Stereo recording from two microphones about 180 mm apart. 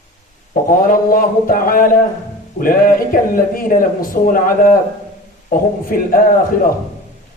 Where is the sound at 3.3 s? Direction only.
50° left (ahead or behind).